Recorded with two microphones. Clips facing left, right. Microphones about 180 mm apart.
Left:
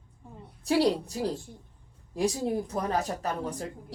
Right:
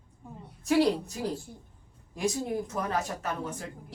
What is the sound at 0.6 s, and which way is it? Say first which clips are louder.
Speech: even; 35° left (ahead or behind).